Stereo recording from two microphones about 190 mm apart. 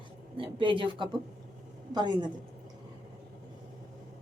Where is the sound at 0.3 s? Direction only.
25° right (ahead or behind).